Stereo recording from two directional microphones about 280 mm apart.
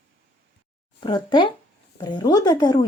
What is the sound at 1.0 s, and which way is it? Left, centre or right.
A woman's voice, centre.